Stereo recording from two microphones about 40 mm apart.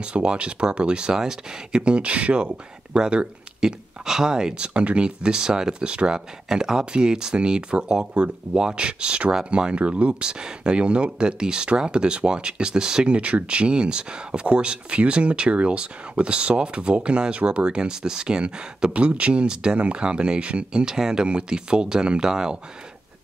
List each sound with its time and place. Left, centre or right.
0.0 s speech: right
10.2 s speech: right